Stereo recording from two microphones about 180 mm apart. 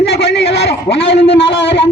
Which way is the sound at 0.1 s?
65° left (ahead or behind).